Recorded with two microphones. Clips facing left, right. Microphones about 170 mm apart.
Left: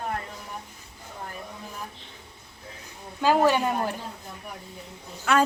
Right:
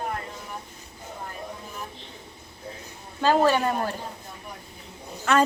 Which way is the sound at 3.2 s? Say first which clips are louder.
Even; 15° left (ahead or behind).